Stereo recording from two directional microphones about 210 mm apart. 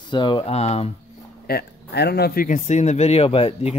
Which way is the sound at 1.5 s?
50° left (ahead or behind).